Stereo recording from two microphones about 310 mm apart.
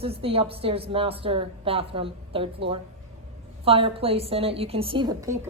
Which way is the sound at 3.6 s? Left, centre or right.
Centre.